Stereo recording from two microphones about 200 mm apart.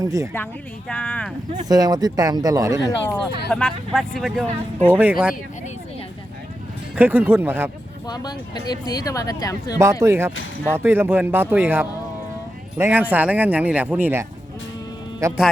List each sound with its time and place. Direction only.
0.0 s speech: 15° right (ahead or behind)
0.9 s speech: 5° left (ahead or behind)
1.6 s speech: 20° right (ahead or behind)
3.5 s speech: 5° left (ahead or behind)
4.9 s speech: 10° right (ahead or behind)
6.9 s speech: 10° right (ahead or behind)
8.0 s speech: 20° left (ahead or behind)
9.7 s speech: 15° right (ahead or behind)